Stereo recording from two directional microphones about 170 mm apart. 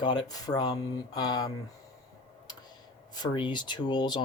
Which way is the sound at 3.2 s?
25° left (ahead or behind).